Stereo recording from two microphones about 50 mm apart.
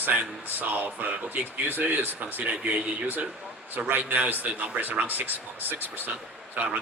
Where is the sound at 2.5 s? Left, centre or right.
Right.